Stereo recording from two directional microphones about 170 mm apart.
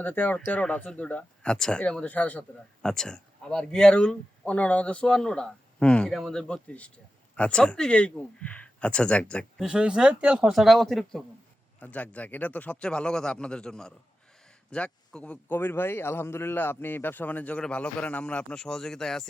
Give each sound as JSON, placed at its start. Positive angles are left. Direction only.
{"t": 0.0, "sound": "a man's voice", "side_deg": 10}